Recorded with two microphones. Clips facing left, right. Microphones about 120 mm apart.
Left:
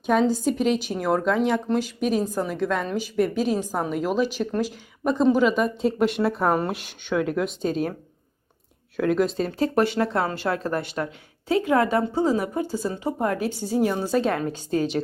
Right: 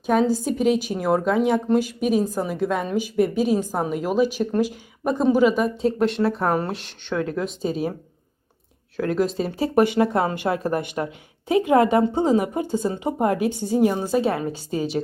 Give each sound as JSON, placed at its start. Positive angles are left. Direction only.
{"t": 0.0, "sound": "speech", "side_deg": -5}
{"t": 9.0, "sound": "speech", "side_deg": 0}